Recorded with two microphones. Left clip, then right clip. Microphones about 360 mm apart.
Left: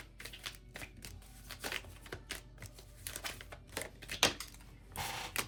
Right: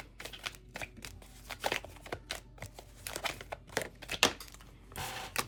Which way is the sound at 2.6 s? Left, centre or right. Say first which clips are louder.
Right 5 dB; centre.